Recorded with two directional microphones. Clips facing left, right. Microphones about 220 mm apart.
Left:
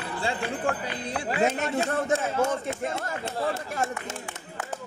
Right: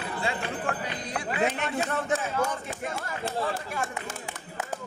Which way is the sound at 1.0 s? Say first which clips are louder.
Left 3 dB; 30° left (ahead or behind).